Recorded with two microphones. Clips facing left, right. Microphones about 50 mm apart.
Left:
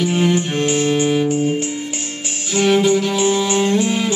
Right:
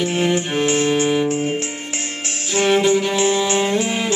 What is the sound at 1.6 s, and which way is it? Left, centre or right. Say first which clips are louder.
Music: left 3 dB; right.